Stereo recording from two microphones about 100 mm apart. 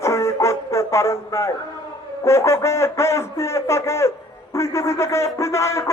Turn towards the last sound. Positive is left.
turn(degrees=30)  # may be behind; listen again after turning